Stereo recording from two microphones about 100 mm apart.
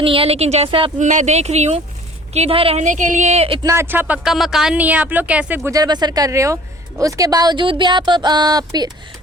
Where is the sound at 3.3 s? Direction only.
90° right.